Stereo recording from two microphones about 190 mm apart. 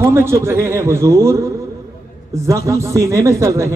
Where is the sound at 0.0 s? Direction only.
15° right (ahead or behind).